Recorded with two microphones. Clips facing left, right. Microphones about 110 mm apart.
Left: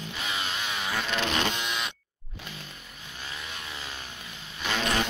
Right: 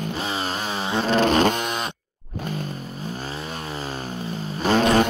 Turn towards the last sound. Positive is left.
turn(degrees=-40)  # may be behind; listen again after turning